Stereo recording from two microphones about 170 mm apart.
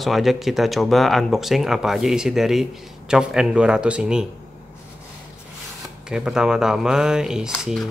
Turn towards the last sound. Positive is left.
turn(degrees=0)  # may be behind; listen again after turning